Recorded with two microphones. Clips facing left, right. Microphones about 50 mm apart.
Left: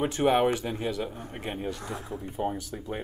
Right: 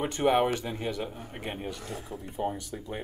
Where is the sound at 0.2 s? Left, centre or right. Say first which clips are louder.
Left 1 dB; centre.